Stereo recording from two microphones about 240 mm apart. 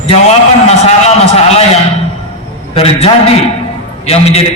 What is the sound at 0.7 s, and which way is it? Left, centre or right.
A man's voice, left.